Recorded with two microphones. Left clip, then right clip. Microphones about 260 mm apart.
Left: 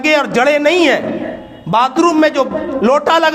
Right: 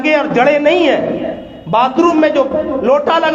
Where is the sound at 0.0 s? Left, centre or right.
Left.